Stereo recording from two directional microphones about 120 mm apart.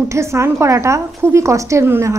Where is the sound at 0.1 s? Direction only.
25° right (ahead or behind).